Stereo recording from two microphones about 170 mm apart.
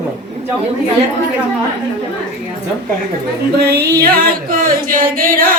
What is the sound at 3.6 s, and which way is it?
Music, 75° right (ahead or behind).